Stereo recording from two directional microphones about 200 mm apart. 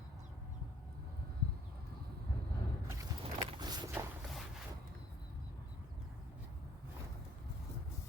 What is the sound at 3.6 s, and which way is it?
Vehicle, 20° right (ahead or behind).